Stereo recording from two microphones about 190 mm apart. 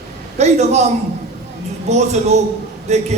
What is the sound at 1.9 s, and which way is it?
Speech, 35° right (ahead or behind).